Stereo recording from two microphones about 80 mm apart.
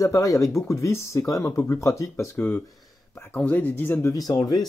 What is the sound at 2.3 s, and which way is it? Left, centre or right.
Speech, left.